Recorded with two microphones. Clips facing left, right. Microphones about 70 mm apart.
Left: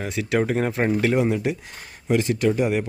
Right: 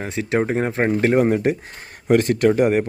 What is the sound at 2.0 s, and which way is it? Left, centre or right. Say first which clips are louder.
Speech: right 5 dB; right.